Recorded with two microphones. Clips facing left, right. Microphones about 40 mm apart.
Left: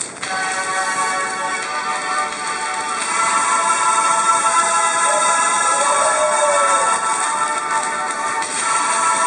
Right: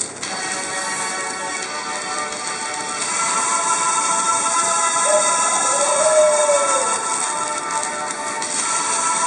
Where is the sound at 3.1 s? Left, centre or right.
Centre.